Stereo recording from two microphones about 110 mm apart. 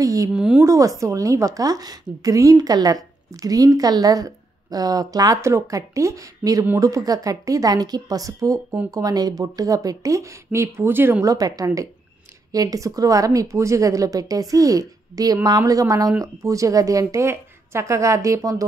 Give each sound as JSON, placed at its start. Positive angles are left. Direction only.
{"t": 0.0, "sound": "a woman's voice", "side_deg": -30}
{"t": 0.3, "sound": "speech", "side_deg": -10}
{"t": 0.7, "sound": "a woman's voice", "side_deg": -30}